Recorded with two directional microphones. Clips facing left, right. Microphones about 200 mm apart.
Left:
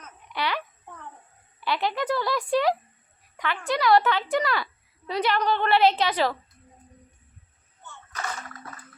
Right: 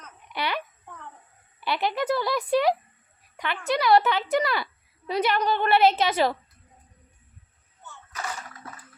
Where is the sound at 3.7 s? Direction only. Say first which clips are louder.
Even; 20° right (ahead or behind).